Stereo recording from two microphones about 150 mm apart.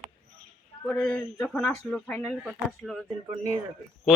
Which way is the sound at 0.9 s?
10° left (ahead or behind).